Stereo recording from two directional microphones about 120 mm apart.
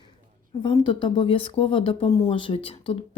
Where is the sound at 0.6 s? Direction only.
40° left (ahead or behind).